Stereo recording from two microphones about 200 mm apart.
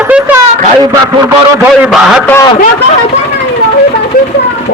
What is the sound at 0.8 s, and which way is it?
Speech, 20° right (ahead or behind).